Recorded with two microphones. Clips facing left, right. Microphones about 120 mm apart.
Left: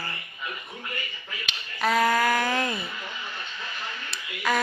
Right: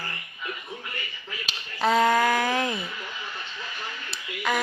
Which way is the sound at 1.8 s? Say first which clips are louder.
Right 2 dB; 25° right (ahead or behind).